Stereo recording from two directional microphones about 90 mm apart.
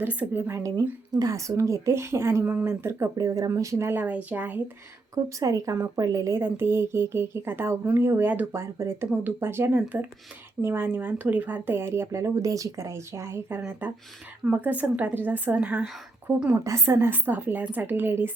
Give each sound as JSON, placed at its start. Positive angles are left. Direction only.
{"t": 0.0, "sound": "speech", "side_deg": -20}
{"t": 1.1, "sound": "speech", "side_deg": -40}
{"t": 4.0, "sound": "speech", "side_deg": -15}
{"t": 5.1, "sound": "speech", "side_deg": -40}
{"t": 6.4, "sound": "speech", "side_deg": -25}
{"t": 8.5, "sound": "speech", "side_deg": -30}
{"t": 16.5, "sound": "speech", "side_deg": -30}